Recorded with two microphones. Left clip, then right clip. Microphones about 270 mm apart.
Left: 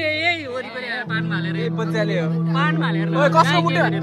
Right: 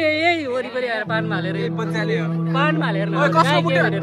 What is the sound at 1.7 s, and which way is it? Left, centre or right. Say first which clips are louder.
Speech: left 4 dB; left.